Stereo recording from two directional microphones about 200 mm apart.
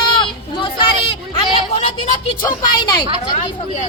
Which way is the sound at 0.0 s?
25° left (ahead or behind).